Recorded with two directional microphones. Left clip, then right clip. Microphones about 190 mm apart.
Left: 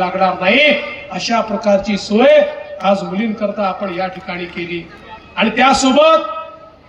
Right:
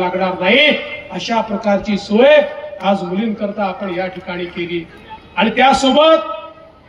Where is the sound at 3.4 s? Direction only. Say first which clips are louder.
Left 5 dB; 20° left (ahead or behind).